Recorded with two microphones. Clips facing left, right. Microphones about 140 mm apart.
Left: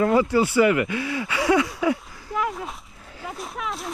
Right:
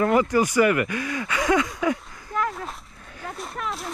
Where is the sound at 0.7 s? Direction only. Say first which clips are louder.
Left 1 dB; 25° left (ahead or behind).